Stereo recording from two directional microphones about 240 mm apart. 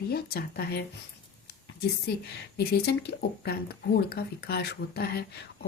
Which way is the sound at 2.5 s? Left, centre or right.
Left.